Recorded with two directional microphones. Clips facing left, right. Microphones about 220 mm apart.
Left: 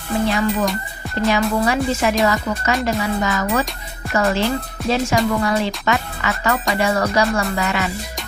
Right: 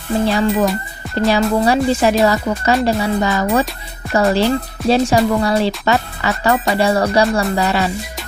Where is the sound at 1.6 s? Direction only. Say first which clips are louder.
Right 4 dB; 35° right (ahead or behind).